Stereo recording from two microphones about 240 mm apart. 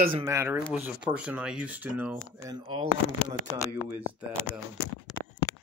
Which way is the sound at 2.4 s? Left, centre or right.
Centre.